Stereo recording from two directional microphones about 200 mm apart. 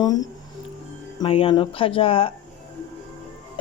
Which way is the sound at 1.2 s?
25° left (ahead or behind).